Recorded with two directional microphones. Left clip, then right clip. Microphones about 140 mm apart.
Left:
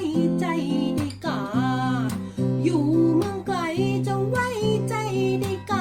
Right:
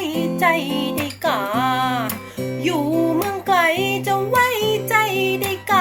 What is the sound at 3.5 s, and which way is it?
Music, 20° left (ahead or behind).